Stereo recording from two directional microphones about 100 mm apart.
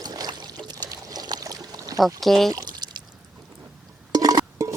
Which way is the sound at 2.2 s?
Centre (ahead or behind).